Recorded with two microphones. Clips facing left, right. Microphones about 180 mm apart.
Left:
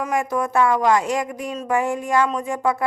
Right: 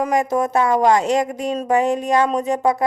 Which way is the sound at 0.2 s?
20° right (ahead or behind).